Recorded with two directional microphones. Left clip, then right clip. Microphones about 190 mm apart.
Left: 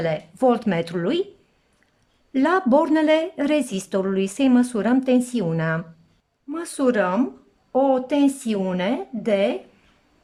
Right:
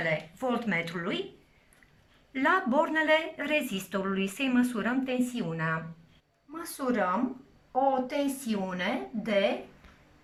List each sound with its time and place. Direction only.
0.3 s a woman's voice: 45° left (ahead or behind)
2.3 s a woman's voice: 40° left (ahead or behind)